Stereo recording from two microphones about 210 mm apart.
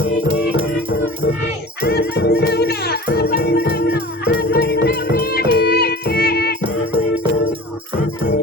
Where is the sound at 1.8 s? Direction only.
50° left (ahead or behind).